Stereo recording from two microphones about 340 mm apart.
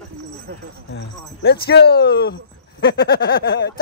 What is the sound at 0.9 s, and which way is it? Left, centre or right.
Speech, left.